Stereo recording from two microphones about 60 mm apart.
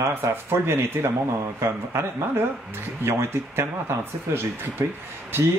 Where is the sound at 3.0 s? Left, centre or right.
Right.